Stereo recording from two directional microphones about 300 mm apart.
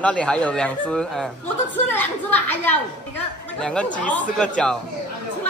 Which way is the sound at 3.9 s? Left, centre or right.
Left.